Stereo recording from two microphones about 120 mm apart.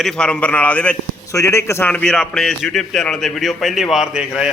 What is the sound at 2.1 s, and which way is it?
A man's voice, 5° left (ahead or behind).